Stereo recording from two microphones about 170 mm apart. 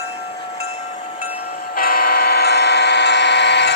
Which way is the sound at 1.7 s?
60° left (ahead or behind).